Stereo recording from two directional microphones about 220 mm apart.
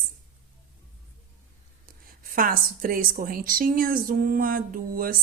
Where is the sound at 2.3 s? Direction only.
40° right (ahead or behind).